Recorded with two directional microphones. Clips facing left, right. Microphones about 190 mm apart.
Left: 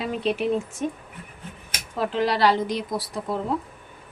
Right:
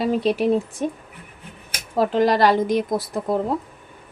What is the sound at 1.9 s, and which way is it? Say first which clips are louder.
Speech: right 6 dB; 45° right (ahead or behind).